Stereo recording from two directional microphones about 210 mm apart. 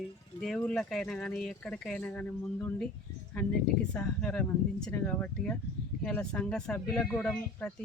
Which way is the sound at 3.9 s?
5° left (ahead or behind).